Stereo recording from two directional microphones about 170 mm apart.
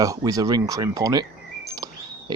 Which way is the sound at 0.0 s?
20° right (ahead or behind).